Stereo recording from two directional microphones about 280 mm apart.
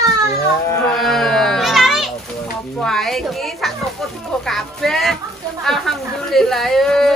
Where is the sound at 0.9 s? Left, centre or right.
Centre.